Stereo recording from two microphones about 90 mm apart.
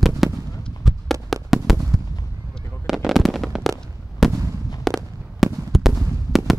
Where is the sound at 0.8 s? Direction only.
Centre (ahead or behind).